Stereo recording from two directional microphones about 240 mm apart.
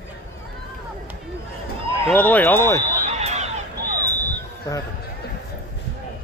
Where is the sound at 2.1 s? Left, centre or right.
Centre.